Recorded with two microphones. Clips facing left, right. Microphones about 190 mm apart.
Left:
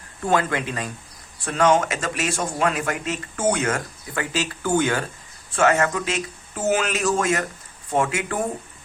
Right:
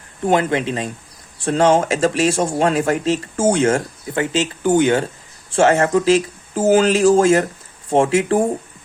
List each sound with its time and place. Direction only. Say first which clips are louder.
0.3 s speech: right 5 dB; 20° right (ahead or behind)